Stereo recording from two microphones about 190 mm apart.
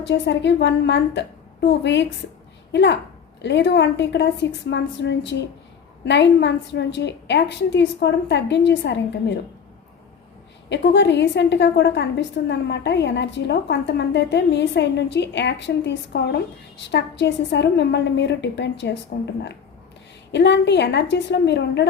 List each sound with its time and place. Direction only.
0.0 s a woman's voice: 65° left (ahead or behind)
10.7 s a woman's voice: 65° left (ahead or behind)
20.3 s a woman's voice: 65° left (ahead or behind)